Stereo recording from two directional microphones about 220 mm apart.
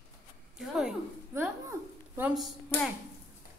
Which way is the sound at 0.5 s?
5° right (ahead or behind).